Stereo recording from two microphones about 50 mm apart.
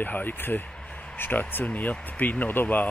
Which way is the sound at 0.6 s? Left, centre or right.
Left.